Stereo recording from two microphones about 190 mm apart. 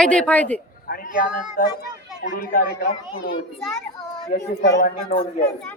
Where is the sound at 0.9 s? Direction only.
50° left (ahead or behind).